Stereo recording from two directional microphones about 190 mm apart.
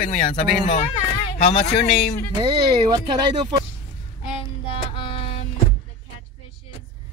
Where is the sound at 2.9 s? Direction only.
25° right (ahead or behind).